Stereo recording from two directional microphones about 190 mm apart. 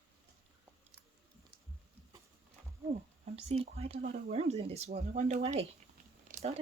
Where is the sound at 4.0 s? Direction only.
50° right (ahead or behind).